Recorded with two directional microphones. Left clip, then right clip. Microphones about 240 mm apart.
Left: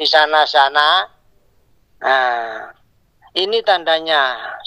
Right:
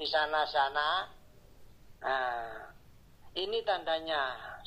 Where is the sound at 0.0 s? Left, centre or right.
Left.